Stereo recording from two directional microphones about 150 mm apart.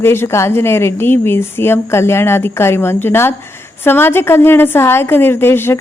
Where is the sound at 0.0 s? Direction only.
15° left (ahead or behind).